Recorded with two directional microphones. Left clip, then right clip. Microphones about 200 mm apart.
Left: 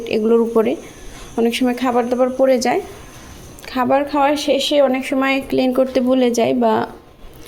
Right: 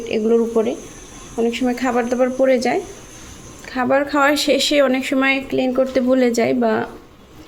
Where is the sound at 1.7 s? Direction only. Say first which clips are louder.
Left 2 dB; 10° left (ahead or behind).